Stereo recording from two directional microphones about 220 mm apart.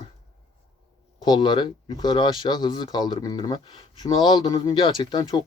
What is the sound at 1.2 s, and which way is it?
Speech, 20° left (ahead or behind).